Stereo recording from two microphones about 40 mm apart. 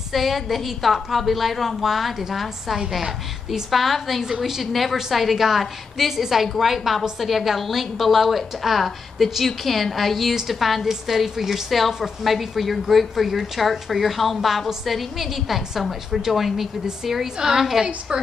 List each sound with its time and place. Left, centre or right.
0.1 s a woman's voice: centre
18.1 s a woman's voice: centre